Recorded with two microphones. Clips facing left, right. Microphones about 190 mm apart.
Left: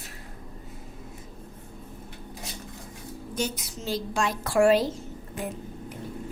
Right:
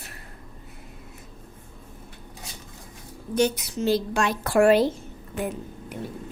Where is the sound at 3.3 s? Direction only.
65° right (ahead or behind).